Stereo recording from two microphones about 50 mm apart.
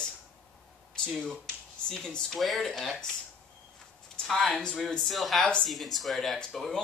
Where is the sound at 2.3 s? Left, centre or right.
Centre.